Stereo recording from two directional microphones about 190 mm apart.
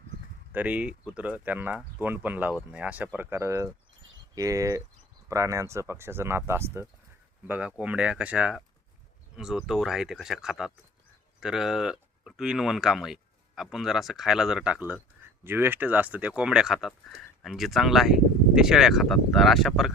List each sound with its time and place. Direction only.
0.5 s speech: 5° right (ahead or behind)